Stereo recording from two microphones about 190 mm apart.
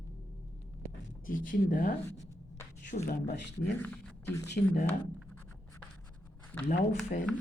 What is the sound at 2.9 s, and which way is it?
Speech, 40° left (ahead or behind).